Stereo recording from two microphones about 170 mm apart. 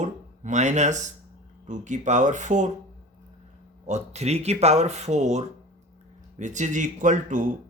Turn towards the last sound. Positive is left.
turn(degrees=-50)  # may be behind; listen again after turning